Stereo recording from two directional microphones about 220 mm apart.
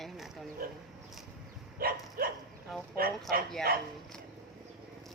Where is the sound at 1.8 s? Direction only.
40° right (ahead or behind).